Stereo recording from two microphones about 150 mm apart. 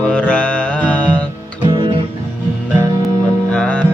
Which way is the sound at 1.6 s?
30° right (ahead or behind).